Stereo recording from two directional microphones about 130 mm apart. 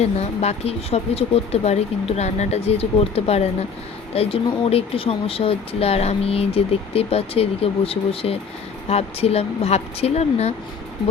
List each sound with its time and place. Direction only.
0.0 s speech: 55° left (ahead or behind)